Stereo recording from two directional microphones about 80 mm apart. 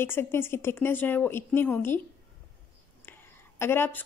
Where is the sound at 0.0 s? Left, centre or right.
Left.